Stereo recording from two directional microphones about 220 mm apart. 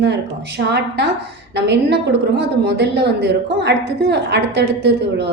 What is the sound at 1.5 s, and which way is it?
A woman's voice, 50° right (ahead or behind).